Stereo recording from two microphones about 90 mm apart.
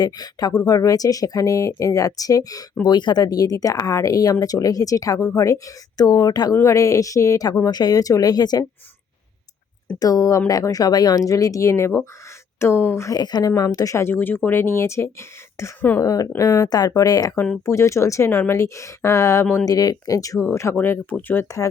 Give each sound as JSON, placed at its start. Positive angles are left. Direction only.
{"t": 0.0, "sound": "speech", "side_deg": 50}
{"t": 2.8, "sound": "speech", "side_deg": 55}
{"t": 6.6, "sound": "speech", "side_deg": 35}
{"t": 10.0, "sound": "speech", "side_deg": 40}
{"t": 13.1, "sound": "speech", "side_deg": 50}
{"t": 16.0, "sound": "speech", "side_deg": 40}
{"t": 17.7, "sound": "speech", "side_deg": 35}
{"t": 19.6, "sound": "speech", "side_deg": 45}